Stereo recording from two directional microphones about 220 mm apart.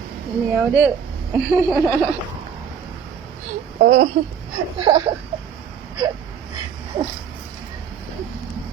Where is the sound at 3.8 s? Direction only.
60° right (ahead or behind).